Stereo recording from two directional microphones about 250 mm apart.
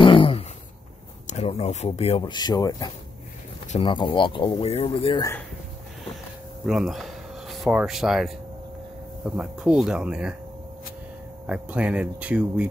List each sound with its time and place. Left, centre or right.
0.0 s a sound: left
1.2 s speech: left
6.6 s speech: centre
11.4 s speech: centre